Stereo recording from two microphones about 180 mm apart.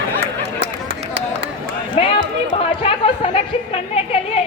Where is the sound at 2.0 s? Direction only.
30° left (ahead or behind).